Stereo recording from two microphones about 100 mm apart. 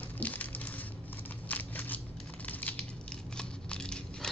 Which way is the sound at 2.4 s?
15° left (ahead or behind).